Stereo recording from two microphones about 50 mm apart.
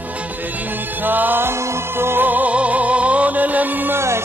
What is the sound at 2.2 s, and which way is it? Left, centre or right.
Music, right.